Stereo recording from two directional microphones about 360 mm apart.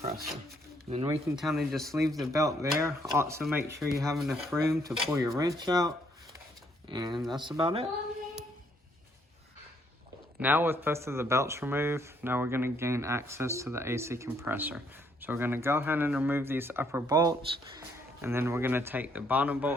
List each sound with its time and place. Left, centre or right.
0.0 s wild animals: right
0.9 s speech: centre
1.4 s speech: centre
10.4 s speech: centre